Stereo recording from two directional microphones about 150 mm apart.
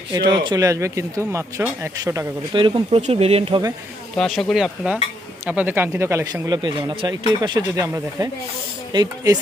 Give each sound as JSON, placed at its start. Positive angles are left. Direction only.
{"t": 0.1, "sound": "speech", "side_deg": -30}
{"t": 2.5, "sound": "speech", "side_deg": -30}
{"t": 4.2, "sound": "speech", "side_deg": 0}